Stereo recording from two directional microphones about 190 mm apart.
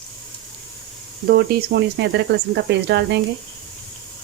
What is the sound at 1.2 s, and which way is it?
Speech, 55° right (ahead or behind).